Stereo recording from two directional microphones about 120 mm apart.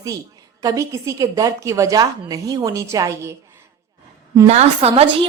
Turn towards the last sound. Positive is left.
turn(degrees=-60)  # may be behind; listen again after turning